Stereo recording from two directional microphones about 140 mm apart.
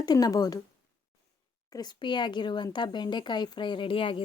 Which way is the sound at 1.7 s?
30° left (ahead or behind).